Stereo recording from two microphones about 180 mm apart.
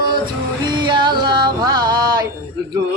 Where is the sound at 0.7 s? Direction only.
25° right (ahead or behind).